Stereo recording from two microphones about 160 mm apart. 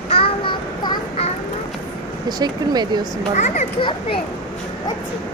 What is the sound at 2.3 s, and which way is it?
Speech, 25° right (ahead or behind).